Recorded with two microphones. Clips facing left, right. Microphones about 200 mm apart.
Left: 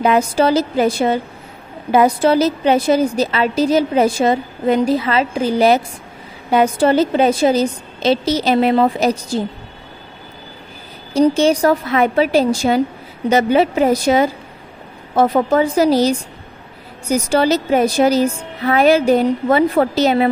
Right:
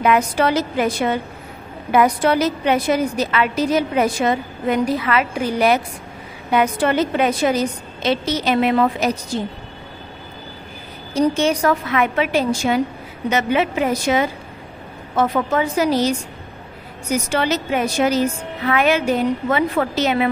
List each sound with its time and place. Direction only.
0.0 s a woman's voice: 30° left (ahead or behind)
11.1 s a woman's voice: 30° left (ahead or behind)